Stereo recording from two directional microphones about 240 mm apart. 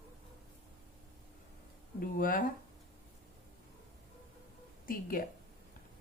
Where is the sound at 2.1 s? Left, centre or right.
Left.